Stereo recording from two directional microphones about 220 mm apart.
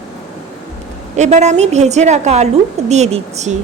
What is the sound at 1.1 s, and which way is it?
A woman's voice, 30° right (ahead or behind).